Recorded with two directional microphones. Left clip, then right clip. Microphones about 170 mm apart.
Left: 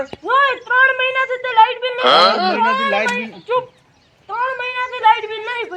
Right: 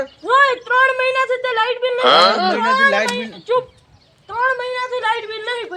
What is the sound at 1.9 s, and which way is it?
Speech, centre (ahead or behind).